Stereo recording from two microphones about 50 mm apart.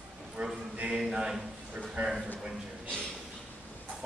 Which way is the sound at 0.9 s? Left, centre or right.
Centre.